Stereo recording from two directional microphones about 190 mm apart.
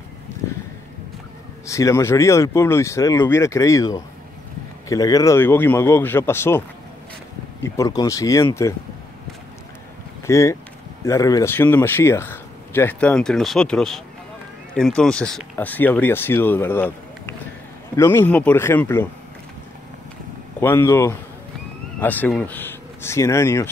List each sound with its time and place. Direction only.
1.7 s speech: 15° left (ahead or behind)
7.6 s speech: 15° left (ahead or behind)
10.2 s speech: 15° left (ahead or behind)
20.6 s speech: 15° left (ahead or behind)